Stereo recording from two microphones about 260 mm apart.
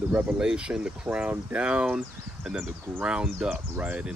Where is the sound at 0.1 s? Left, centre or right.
Centre.